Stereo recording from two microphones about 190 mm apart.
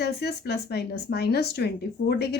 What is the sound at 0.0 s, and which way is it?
Speech, 60° left (ahead or behind).